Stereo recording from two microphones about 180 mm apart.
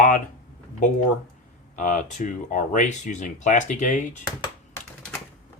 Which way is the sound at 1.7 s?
45° left (ahead or behind).